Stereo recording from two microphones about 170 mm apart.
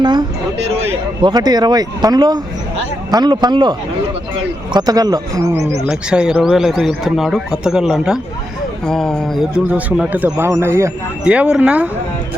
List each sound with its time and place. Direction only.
0.0 s a sound: 25° right (ahead or behind)
1.2 s a man's voice: 25° right (ahead or behind)
5.9 s a man's voice: 5° right (ahead or behind)